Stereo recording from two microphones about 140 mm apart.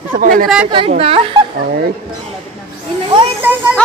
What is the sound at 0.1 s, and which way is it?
Speech, 80° right.